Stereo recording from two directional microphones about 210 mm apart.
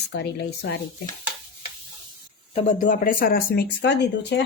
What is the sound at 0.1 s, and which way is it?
Speech, 55° left (ahead or behind).